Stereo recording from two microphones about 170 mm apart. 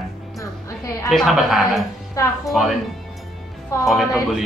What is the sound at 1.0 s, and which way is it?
Speech, centre (ahead or behind).